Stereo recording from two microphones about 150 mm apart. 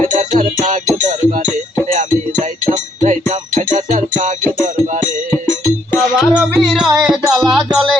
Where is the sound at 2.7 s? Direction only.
50° right (ahead or behind).